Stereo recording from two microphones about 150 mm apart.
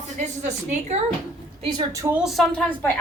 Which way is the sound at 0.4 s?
50° right (ahead or behind).